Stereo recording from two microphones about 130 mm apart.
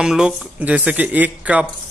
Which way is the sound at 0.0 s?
5° right (ahead or behind).